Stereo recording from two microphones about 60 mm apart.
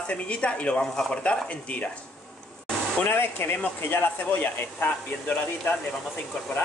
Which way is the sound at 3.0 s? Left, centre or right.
Left.